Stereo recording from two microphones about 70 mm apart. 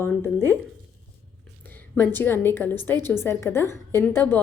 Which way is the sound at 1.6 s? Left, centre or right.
Left.